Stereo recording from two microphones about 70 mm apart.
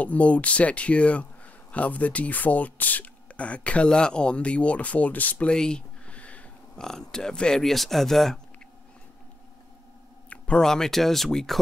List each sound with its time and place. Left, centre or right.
0.0 s speech: left
5.5 s a sound: centre
6.8 s speech: centre
10.3 s speech: centre